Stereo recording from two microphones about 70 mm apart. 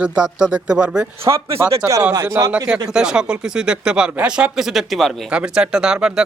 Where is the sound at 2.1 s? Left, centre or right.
Right.